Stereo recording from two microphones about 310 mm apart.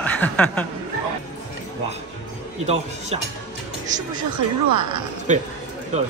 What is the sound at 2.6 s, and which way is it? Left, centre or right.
Speech, right.